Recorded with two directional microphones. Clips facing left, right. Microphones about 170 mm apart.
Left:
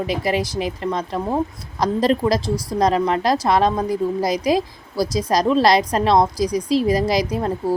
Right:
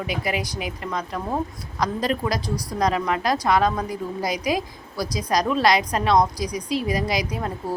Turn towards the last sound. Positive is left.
turn(degrees=35)  # may be behind; listen again after turning